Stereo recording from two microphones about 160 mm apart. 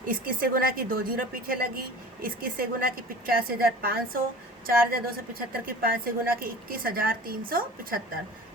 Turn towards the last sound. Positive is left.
turn(degrees=-65)  # may be behind; listen again after turning